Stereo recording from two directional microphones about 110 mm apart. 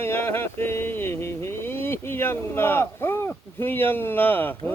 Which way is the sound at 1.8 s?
20° left (ahead or behind).